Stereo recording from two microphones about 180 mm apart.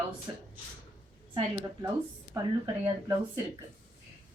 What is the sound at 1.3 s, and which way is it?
Speech, 25° right (ahead or behind).